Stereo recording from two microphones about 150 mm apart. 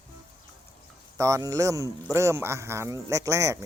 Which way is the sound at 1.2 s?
20° right (ahead or behind).